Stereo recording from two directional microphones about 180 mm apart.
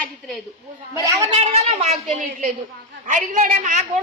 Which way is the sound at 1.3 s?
35° right (ahead or behind).